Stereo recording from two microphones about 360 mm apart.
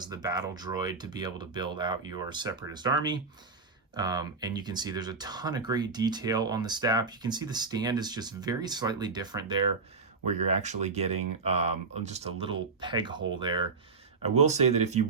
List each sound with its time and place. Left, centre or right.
0.0 s speech: centre